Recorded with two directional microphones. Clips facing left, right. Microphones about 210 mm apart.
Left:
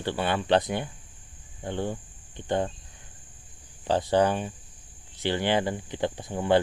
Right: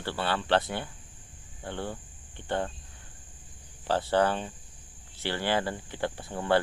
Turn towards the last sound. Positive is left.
turn(degrees=15)  # may be behind; listen again after turning